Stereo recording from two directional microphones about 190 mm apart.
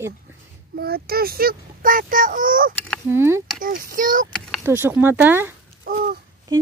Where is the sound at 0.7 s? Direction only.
55° right (ahead or behind).